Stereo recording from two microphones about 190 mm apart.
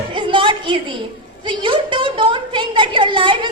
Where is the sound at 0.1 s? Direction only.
25° right (ahead or behind).